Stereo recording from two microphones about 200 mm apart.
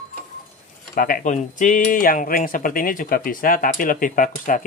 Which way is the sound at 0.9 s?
45° left (ahead or behind).